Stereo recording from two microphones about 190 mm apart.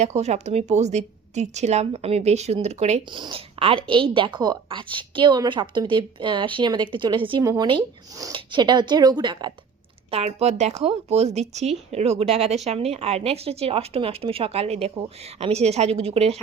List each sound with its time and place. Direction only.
0.0 s a woman's voice: 35° right (ahead or behind)
10.1 s a woman's voice: 35° right (ahead or behind)